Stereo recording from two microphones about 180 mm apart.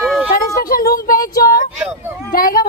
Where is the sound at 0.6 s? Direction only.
50° left (ahead or behind).